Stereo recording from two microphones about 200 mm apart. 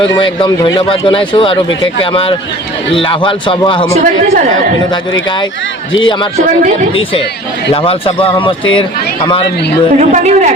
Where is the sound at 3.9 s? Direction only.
40° right (ahead or behind).